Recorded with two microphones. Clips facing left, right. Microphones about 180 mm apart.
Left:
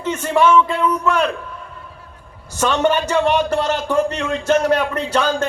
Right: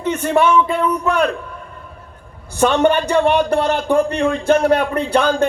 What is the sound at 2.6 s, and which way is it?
A man's voice, 55° right (ahead or behind).